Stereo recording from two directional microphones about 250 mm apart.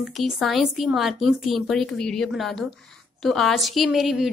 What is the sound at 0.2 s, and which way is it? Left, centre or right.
A woman's voice, centre.